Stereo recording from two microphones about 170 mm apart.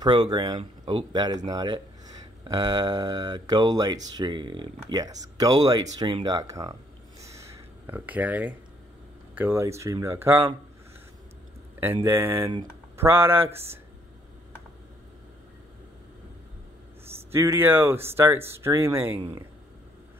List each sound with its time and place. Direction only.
0.0 s speech: 25° right (ahead or behind)
7.2 s a sound: 15° right (ahead or behind)
9.3 s speech: 10° right (ahead or behind)
11.8 s speech: 15° right (ahead or behind)
13.5 s speech: 35° right (ahead or behind)
17.3 s speech: 15° right (ahead or behind)